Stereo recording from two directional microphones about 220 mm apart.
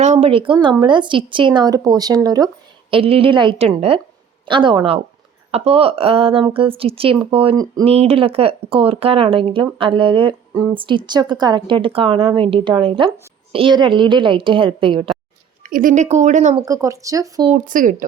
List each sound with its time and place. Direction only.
0.0 s speech: 30° right (ahead or behind)
15.6 s a woman's voice: 35° right (ahead or behind)
16.6 s speech: 15° right (ahead or behind)
17.5 s a woman's voice: 35° right (ahead or behind)